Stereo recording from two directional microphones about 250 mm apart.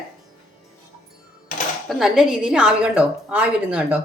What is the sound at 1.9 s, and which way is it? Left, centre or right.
A woman's voice, centre.